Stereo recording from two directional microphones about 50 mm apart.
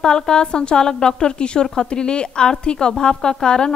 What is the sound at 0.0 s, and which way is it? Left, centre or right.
Speech, centre.